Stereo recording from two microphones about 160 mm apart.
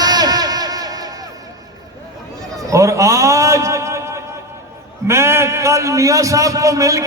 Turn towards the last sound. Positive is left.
turn(degrees=-20)  # may be behind; listen again after turning